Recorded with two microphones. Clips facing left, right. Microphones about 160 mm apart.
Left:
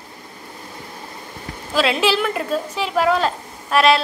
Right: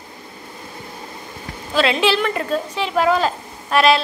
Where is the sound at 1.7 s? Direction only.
5° left (ahead or behind).